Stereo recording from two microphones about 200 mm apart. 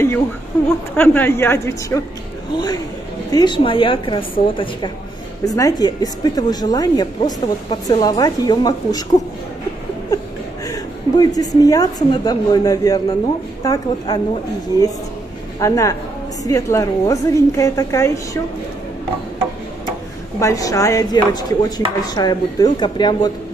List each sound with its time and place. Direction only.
0.9 s a woman's voice: 10° left (ahead or behind)
10.7 s a woman's voice: 20° left (ahead or behind)
15.6 s a woman's voice: 15° left (ahead or behind)
20.3 s a woman's voice: 15° left (ahead or behind)